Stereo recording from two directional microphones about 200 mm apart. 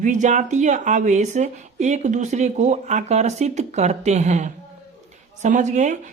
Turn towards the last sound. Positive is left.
turn(degrees=-35)  # may be behind; listen again after turning